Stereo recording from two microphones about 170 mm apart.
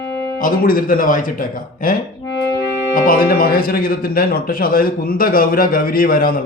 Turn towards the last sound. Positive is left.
turn(degrees=60)  # may be behind; listen again after turning